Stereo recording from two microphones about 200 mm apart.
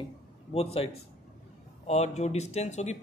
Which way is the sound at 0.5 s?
30° left (ahead or behind).